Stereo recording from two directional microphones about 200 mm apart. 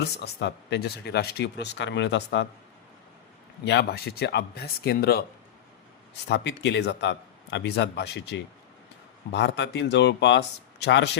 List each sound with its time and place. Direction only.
0.0 s speech: 60° left (ahead or behind)
3.6 s speech: 55° left (ahead or behind)
6.2 s speech: 60° left (ahead or behind)